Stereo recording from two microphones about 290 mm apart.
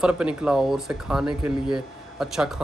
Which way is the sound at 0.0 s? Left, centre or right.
Centre.